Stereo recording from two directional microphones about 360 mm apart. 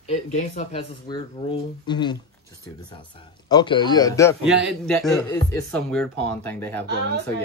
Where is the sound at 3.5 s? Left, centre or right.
Centre.